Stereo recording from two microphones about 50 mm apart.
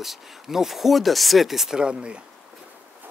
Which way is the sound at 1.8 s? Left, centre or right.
Centre.